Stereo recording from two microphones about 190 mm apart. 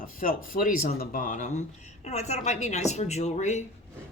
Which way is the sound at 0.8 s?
50° left (ahead or behind).